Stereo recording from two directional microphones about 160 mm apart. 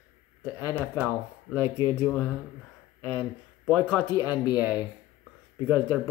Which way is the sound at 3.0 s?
10° left (ahead or behind).